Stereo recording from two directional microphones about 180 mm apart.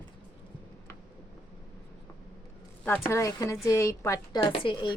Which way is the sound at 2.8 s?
15° left (ahead or behind).